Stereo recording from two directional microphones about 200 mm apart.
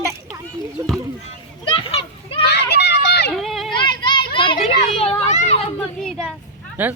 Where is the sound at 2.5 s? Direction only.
55° left (ahead or behind).